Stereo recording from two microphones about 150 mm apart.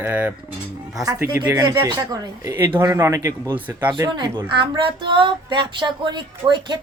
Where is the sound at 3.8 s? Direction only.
30° right (ahead or behind).